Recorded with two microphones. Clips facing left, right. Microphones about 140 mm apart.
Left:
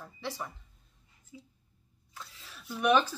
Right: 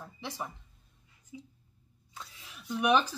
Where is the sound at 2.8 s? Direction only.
10° right (ahead or behind).